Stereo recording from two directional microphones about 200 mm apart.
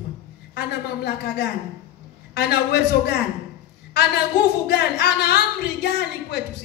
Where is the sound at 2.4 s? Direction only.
55° left (ahead or behind).